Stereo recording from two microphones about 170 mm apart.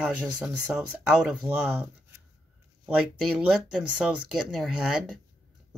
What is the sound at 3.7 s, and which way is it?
Speech, 5° right (ahead or behind).